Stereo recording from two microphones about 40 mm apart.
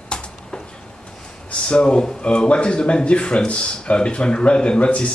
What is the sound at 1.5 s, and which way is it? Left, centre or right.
Speech, left.